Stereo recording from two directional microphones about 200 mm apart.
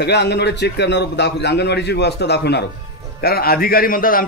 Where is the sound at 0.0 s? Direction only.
55° left (ahead or behind).